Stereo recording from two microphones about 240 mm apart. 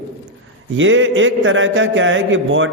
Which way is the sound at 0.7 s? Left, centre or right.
Right.